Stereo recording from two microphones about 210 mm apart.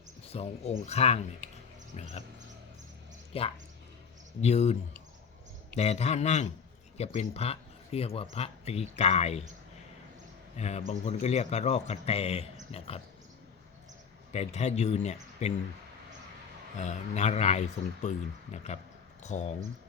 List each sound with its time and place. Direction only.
0.3 s speech: 30° left (ahead or behind)
3.3 s speech: 30° left (ahead or behind)
10.6 s speech: 30° left (ahead or behind)
14.3 s speech: 30° left (ahead or behind)
16.7 s speech: 35° left (ahead or behind)